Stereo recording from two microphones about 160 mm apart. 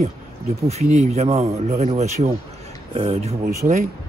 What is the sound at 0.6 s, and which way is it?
Speech, 40° right (ahead or behind).